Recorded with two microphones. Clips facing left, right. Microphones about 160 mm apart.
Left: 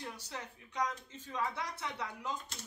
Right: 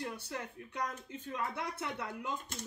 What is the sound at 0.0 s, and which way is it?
Speech, 55° right (ahead or behind).